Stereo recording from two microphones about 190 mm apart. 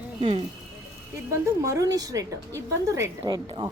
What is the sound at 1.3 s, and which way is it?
A woman's voice, 15° right (ahead or behind).